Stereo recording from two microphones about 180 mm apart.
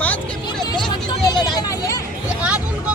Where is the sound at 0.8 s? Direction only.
25° left (ahead or behind).